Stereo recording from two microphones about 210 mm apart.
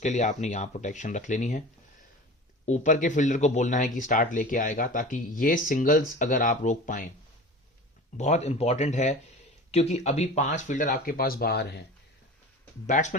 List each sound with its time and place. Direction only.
0.0 s speech: 35° left (ahead or behind)
2.6 s speech: 35° left (ahead or behind)
8.2 s speech: 30° left (ahead or behind); by 11.8 s 50° left (ahead or behind)
12.9 s speech: 35° left (ahead or behind)